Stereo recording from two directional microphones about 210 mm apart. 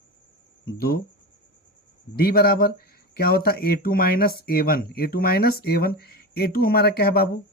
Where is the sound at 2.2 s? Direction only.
45° left (ahead or behind).